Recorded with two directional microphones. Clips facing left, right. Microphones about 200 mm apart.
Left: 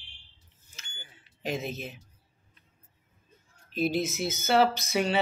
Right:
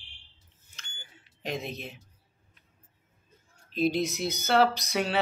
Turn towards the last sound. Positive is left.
turn(degrees=0)  # may be behind; listen again after turning